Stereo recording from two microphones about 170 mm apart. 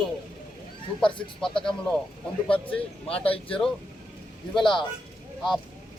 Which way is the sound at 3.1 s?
10° left (ahead or behind).